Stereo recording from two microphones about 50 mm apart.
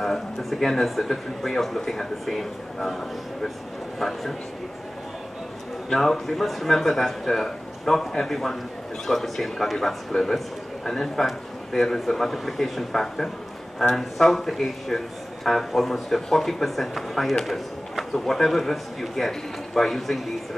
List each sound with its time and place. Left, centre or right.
0.0 s speech: centre
4.0 s speech: centre
5.9 s speech: centre